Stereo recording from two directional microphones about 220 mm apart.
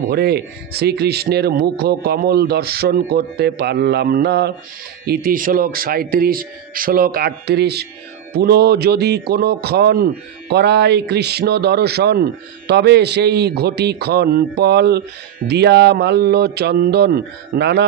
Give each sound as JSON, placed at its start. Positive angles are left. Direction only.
{"t": 0.1, "sound": "a man's voice", "side_deg": -45}